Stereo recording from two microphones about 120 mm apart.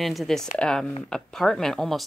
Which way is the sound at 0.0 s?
Centre (ahead or behind).